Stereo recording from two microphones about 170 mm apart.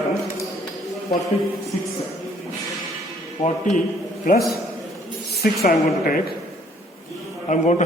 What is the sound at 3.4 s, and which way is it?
Speech, 45° left (ahead or behind).